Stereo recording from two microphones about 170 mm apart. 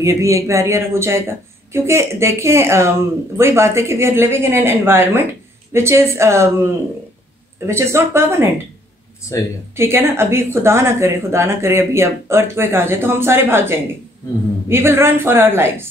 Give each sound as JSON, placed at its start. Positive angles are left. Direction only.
{"t": 0.0, "sound": "speech", "side_deg": -15}
{"t": 9.8, "sound": "speech", "side_deg": -15}